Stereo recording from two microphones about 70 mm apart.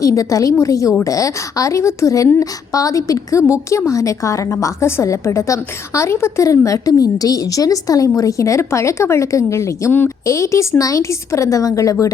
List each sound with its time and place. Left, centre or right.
0.0 s a woman's voice: left